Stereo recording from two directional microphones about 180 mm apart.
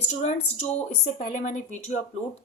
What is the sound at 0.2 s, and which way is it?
A woman's voice, 35° left (ahead or behind).